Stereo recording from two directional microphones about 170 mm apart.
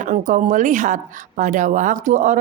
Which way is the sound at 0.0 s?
45° right (ahead or behind).